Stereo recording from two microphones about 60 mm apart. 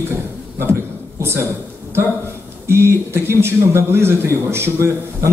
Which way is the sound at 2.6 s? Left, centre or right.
Right.